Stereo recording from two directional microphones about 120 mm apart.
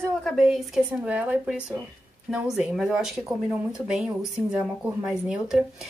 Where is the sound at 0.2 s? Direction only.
Centre (ahead or behind).